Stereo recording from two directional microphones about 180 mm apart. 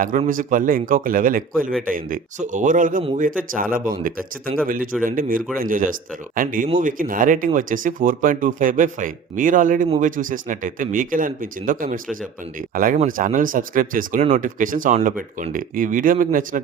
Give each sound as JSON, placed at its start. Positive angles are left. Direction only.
{"t": 0.3, "sound": "speech", "side_deg": -50}